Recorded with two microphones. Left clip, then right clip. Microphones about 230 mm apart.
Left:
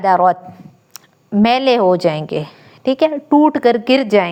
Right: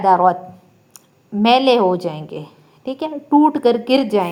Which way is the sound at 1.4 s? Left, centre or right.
Left.